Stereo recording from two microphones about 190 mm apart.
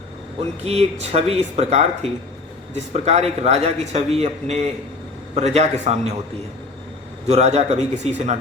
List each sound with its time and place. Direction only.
0.6 s a man's voice: 35° right (ahead or behind)
7.3 s a man's voice: 35° right (ahead or behind)